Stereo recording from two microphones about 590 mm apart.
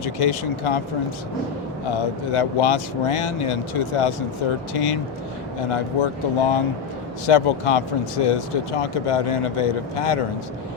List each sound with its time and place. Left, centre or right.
0.0 s speech: left
1.9 s speech: left
5.7 s speech: left